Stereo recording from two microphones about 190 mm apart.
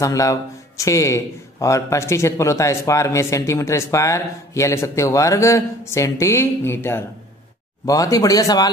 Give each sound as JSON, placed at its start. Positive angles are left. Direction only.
{"t": 0.0, "sound": "speech", "side_deg": 15}